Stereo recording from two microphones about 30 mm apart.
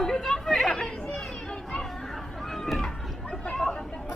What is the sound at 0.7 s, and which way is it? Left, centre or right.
Speech, centre.